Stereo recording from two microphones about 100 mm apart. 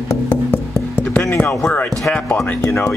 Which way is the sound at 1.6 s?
15° left (ahead or behind).